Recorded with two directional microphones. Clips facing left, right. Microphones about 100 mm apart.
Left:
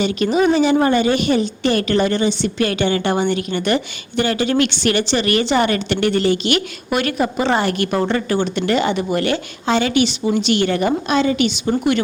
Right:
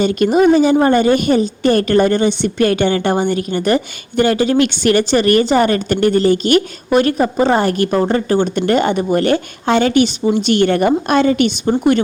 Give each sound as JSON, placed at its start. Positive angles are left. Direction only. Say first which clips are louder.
{"t": 0.0, "sound": "a woman's voice", "louder": "right 4 dB", "side_deg": -45}
{"t": 8.5, "sound": "a woman's voice", "louder": "right 3 dB", "side_deg": -45}